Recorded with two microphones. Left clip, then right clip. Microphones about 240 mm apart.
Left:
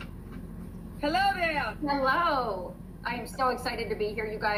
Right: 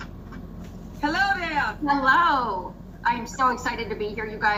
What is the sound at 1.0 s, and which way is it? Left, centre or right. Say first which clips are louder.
A woman's voice: right 3 dB; centre.